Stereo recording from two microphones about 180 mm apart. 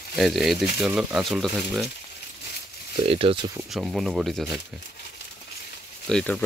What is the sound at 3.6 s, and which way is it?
Speech, centre (ahead or behind).